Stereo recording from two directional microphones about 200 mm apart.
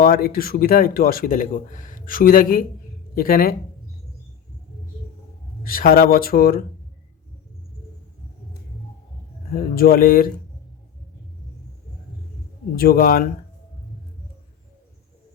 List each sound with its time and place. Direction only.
0.0 s speech: 45° left (ahead or behind)
5.6 s speech: 45° left (ahead or behind)
9.5 s speech: 45° left (ahead or behind)
12.7 s speech: 50° left (ahead or behind)